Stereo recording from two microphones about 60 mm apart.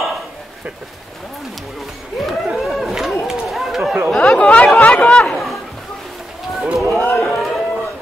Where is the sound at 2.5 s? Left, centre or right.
Centre.